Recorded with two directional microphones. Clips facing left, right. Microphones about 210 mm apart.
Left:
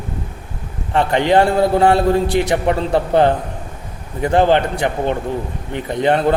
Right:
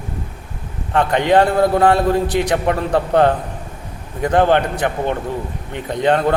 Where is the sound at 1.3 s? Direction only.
10° left (ahead or behind).